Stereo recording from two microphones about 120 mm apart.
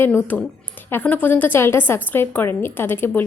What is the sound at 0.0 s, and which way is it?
A woman's voice, 15° left (ahead or behind).